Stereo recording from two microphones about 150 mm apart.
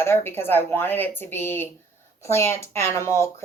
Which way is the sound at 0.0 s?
15° left (ahead or behind).